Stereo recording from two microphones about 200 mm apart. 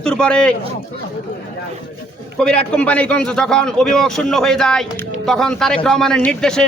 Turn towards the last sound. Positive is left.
turn(degrees=5)  # may be behind; listen again after turning